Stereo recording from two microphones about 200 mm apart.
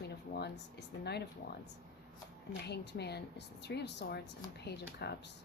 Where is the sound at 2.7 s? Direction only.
55° left (ahead or behind).